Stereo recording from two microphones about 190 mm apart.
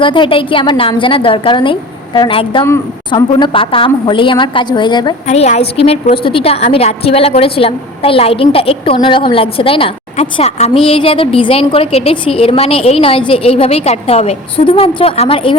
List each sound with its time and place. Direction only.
0.0 s a woman's voice: 25° left (ahead or behind)